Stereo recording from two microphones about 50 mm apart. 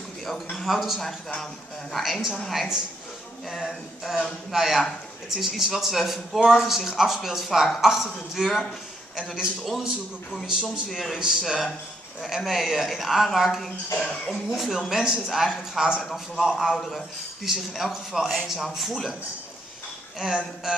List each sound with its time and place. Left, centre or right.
0.2 s a man's voice: centre
0.7 s a man's voice: centre
1.4 s a man's voice: centre
2.5 s a man's voice: centre
11.1 s a man's voice: centre
13.9 s a man's voice: centre
14.5 s a man's voice: centre